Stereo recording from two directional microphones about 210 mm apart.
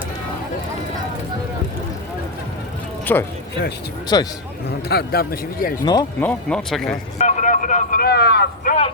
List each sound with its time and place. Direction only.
3.1 s speech: 10° left (ahead or behind)
4.9 s speech: 50° left (ahead or behind)
5.8 s speech: 20° left (ahead or behind)
6.2 s speech: 5° left (ahead or behind)
7.2 s a man's voice: 35° left (ahead or behind); by 8.7 s 50° left (ahead or behind)